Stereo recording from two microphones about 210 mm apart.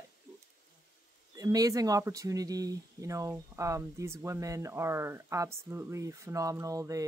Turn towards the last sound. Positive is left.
turn(degrees=-15)  # may be behind; listen again after turning